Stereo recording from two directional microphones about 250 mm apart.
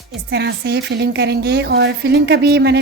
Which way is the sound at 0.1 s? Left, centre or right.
Right.